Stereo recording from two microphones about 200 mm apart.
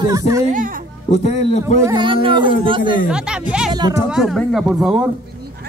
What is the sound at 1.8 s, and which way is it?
Speech, 20° right (ahead or behind).